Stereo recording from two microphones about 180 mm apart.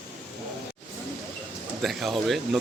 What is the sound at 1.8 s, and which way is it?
Speech, centre (ahead or behind).